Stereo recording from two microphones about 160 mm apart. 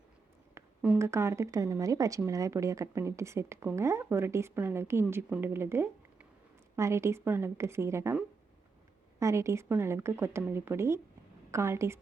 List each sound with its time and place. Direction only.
0.5 s speech: 10° right (ahead or behind)